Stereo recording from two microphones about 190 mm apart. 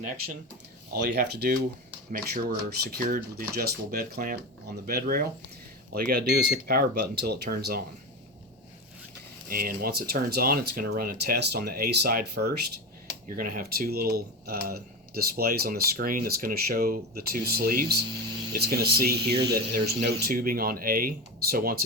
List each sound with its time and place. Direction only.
1.0 s speech: 55° right (ahead or behind)
9.5 s speech: 50° right (ahead or behind)